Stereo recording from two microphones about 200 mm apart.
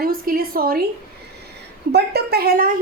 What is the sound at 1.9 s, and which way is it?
Speech, 55° right (ahead or behind).